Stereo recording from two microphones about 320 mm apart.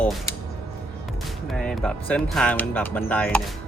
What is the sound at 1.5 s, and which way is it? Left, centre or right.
Speech, centre.